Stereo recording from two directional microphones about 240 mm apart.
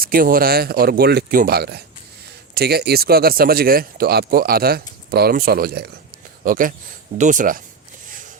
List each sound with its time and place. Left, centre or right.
0.0 s a man's voice: right